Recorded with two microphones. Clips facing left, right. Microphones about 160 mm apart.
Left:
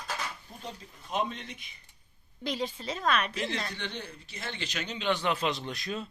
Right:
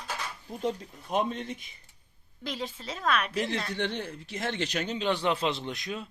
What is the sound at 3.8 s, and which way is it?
Speech, 75° right (ahead or behind).